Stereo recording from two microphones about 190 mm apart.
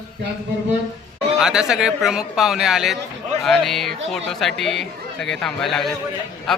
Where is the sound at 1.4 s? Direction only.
5° right (ahead or behind).